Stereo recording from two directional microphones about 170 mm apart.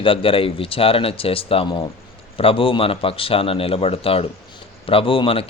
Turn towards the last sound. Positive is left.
turn(degrees=30)  # may be behind; listen again after turning